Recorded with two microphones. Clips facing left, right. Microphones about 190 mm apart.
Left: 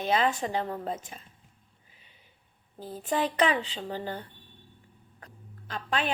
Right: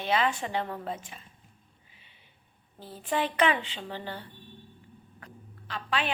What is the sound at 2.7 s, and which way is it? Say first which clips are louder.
A woman's voice: left 1 dB; 40° left (ahead or behind).